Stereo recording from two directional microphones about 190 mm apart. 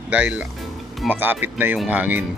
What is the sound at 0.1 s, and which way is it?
Speech, 5° right (ahead or behind).